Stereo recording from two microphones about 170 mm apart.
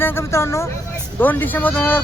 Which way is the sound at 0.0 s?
15° left (ahead or behind).